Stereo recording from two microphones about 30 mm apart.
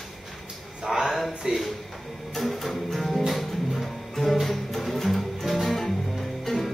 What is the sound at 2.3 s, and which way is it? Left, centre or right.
Music, centre.